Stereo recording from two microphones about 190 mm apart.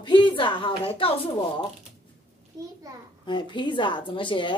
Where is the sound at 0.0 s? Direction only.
25° left (ahead or behind).